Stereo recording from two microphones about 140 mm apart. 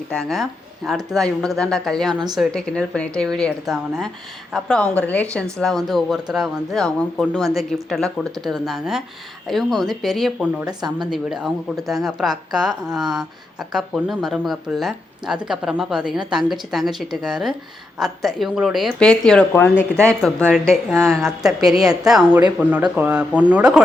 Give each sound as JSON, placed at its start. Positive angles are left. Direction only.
{"t": 0.1, "sound": "a woman's voice", "side_deg": 5}
{"t": 10.7, "sound": "speech", "side_deg": -30}
{"t": 11.1, "sound": "a woman's voice", "side_deg": -5}